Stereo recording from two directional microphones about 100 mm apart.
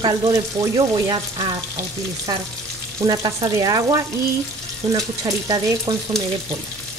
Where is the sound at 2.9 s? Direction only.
40° right (ahead or behind).